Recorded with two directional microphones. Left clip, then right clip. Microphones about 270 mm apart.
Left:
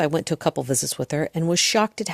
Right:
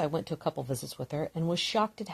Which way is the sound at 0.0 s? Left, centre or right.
Left.